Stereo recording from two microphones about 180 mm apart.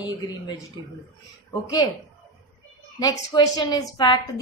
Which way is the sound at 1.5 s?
20° left (ahead or behind).